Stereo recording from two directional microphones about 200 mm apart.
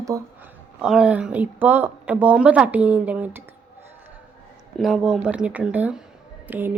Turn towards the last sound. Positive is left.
turn(degrees=-10)  # may be behind; listen again after turning